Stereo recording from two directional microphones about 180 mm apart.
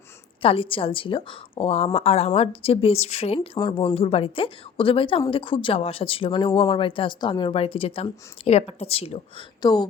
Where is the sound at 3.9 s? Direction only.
30° left (ahead or behind).